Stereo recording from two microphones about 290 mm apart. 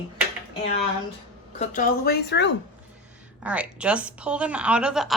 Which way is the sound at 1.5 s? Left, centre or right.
Left.